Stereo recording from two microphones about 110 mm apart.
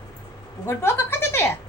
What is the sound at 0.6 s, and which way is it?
Speech, 20° left (ahead or behind).